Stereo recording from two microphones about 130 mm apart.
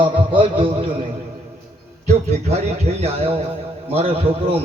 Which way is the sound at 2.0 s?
55° right (ahead or behind).